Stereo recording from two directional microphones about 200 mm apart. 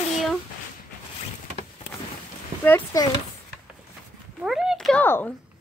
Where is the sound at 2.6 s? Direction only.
15° left (ahead or behind).